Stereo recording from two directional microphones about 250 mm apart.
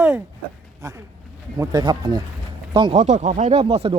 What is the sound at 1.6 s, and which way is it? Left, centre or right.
Speech, centre.